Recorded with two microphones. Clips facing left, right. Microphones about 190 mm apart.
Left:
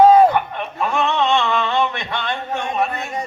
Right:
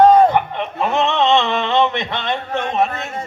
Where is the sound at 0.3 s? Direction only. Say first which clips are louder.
Right 2 dB; 20° right (ahead or behind).